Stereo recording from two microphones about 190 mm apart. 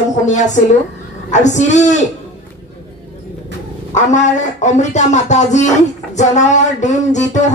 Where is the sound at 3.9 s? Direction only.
40° left (ahead or behind).